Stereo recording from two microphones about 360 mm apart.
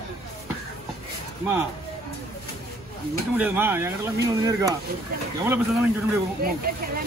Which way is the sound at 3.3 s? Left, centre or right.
Centre.